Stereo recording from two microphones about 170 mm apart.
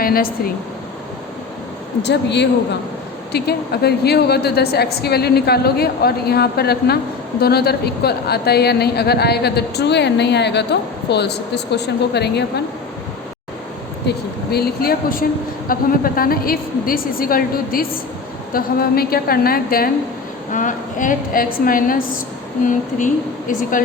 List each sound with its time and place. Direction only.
0.0 s speech: 60° left (ahead or behind)
2.0 s speech: 85° left
3.3 s a woman's voice: 70° left (ahead or behind)
14.5 s a woman's voice: 65° left (ahead or behind)
20.5 s a woman's voice: 50° left (ahead or behind)
23.5 s speech: 50° left (ahead or behind)